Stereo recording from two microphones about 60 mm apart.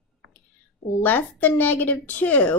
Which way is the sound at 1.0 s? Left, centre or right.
Left.